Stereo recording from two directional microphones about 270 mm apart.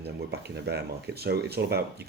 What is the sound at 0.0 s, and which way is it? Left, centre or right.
Speech, right.